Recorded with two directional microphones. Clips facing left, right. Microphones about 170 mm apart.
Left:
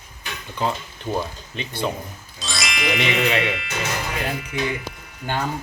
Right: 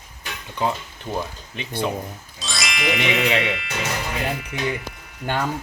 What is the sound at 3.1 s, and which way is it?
Speech, centre (ahead or behind).